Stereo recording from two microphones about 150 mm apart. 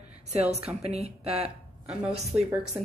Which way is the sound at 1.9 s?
5° right (ahead or behind).